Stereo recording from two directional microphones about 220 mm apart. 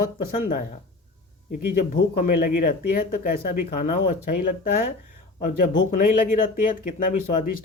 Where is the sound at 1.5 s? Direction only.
40° left (ahead or behind).